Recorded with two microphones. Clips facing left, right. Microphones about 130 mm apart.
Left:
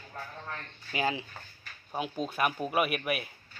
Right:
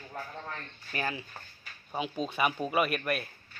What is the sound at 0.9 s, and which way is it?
Speech, 20° left (ahead or behind).